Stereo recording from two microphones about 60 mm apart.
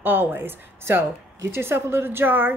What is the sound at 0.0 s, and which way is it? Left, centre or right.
A woman's voice, right.